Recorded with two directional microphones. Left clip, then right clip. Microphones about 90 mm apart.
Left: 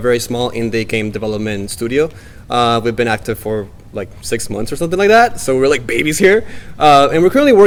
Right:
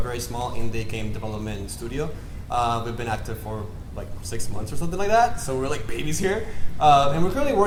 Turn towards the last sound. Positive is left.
turn(degrees=50)  # may be behind; listen again after turning